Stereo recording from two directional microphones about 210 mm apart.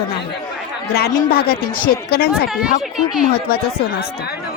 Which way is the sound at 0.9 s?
45° left (ahead or behind).